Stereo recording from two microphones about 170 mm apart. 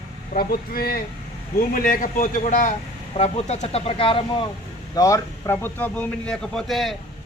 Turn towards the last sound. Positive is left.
turn(degrees=0)  # may be behind; listen again after turning